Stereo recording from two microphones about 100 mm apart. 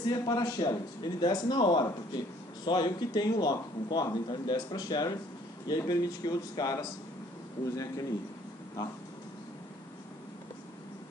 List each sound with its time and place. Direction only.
0.1 s a man's voice: 40° left (ahead or behind)